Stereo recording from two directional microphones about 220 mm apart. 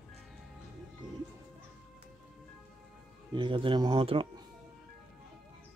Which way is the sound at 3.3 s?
20° right (ahead or behind).